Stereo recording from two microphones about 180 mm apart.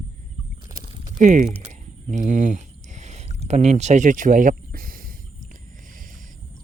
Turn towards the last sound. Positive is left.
turn(degrees=-50)  # may be behind; listen again after turning